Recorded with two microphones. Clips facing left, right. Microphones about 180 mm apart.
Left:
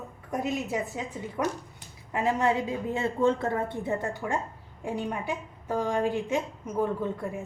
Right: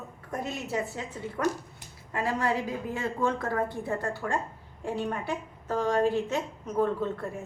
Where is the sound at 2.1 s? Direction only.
20° left (ahead or behind).